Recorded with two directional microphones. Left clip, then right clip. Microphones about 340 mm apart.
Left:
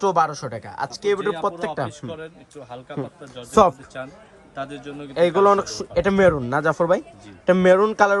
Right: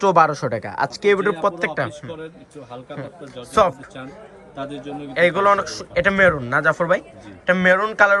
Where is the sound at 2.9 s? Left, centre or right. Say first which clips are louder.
Left 2 dB; left.